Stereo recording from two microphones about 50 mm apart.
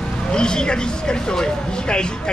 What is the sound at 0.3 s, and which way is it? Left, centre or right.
Speech, centre.